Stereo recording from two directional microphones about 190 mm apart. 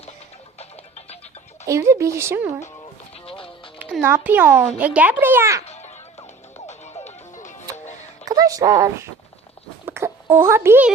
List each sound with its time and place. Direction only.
0.6 s music: 35° left (ahead or behind)
1.6 s a child's voice: 15° right (ahead or behind)
3.2 s music: 30° left (ahead or behind)
3.8 s a child's voice: 10° right (ahead or behind)
5.6 s music: 35° left (ahead or behind)
8.2 s speech: 20° right (ahead or behind)
9.8 s a sound: 10° right (ahead or behind)